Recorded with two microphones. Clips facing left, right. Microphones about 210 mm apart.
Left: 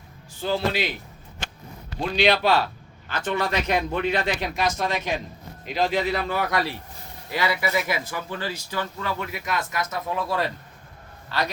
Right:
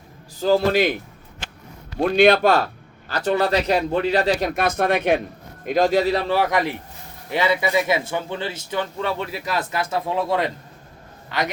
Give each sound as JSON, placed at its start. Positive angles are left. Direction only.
{"t": 0.3, "sound": "a man's voice", "side_deg": -40}
{"t": 2.0, "sound": "a man's voice", "side_deg": -55}
{"t": 3.1, "sound": "speech", "side_deg": -35}
{"t": 5.6, "sound": "a man's voice", "side_deg": -45}